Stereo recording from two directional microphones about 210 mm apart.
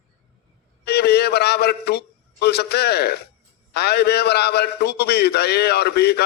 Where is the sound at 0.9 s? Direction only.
50° left (ahead or behind).